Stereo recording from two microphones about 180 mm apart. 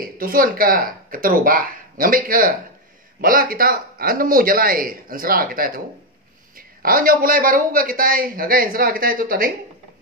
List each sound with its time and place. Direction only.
0.0 s a man's voice: 50° right (ahead or behind)
6.8 s a man's voice: 50° right (ahead or behind)